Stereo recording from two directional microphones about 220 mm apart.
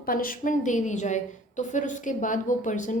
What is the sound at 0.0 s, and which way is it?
A woman's voice, 40° left (ahead or behind).